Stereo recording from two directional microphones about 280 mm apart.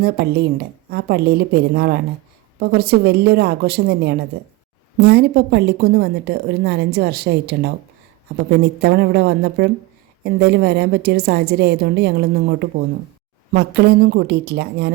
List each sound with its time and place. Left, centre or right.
0.0 s a woman's voice: right